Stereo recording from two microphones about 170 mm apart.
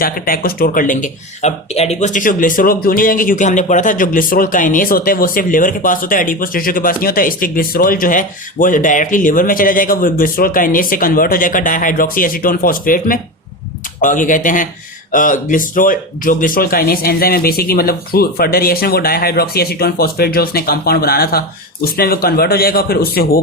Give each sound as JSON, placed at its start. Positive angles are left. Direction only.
{"t": 0.0, "sound": "a man's voice", "side_deg": 60}